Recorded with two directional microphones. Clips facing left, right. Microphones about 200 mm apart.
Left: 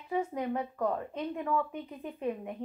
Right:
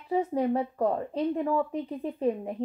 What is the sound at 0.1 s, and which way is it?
Speech, 35° right (ahead or behind).